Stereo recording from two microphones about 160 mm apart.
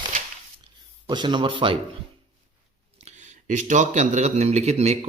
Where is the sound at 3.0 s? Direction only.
45° right (ahead or behind).